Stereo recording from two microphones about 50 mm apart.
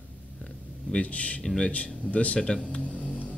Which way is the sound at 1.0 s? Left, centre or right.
Left.